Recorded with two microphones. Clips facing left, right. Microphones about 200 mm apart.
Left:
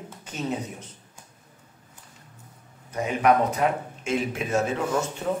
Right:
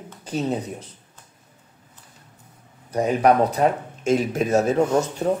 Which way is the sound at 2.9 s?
35° right (ahead or behind).